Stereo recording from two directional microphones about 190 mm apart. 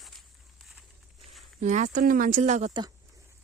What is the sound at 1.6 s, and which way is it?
Speech, 40° right (ahead or behind).